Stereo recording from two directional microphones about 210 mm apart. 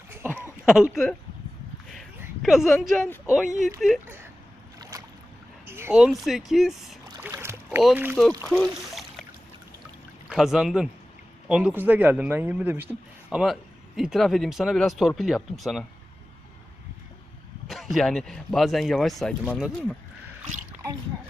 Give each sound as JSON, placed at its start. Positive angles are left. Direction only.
{"t": 0.3, "sound": "a sound", "side_deg": -5}
{"t": 2.4, "sound": "speech", "side_deg": 0}
{"t": 4.8, "sound": "boat", "side_deg": -15}
{"t": 5.6, "sound": "speech", "side_deg": -10}
{"t": 7.0, "sound": "boat", "side_deg": -15}
{"t": 8.4, "sound": "a sound", "side_deg": 0}
{"t": 10.2, "sound": "speech", "side_deg": 0}
{"t": 17.7, "sound": "speech", "side_deg": 0}